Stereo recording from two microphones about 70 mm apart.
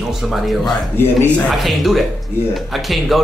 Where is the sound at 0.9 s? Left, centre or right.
Left.